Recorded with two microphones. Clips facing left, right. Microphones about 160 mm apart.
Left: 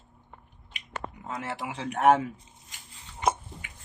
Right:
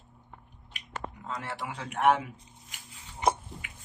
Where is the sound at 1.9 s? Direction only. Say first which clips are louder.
Left 3 dB; 40° left (ahead or behind).